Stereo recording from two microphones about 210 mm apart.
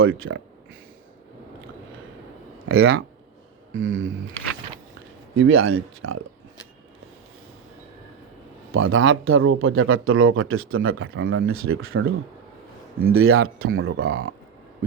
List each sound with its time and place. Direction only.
0.0 s speech: 75° right (ahead or behind)
2.6 s speech: 85° right
3.8 s speech: 65° right (ahead or behind)
5.4 s speech: 70° right (ahead or behind)
8.7 s speech: 70° right (ahead or behind)
13.1 s speech: 85° right